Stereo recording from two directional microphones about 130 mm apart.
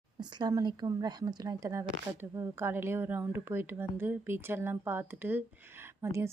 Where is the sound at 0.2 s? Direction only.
30° right (ahead or behind).